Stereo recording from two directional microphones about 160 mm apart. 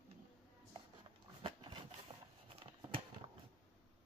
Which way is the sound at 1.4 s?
30° right (ahead or behind).